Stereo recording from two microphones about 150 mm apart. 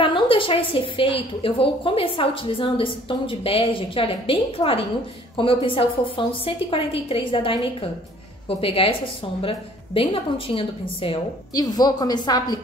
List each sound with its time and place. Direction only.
0.0 s a woman's voice: 35° left (ahead or behind)
11.5 s a woman's voice: 25° left (ahead or behind)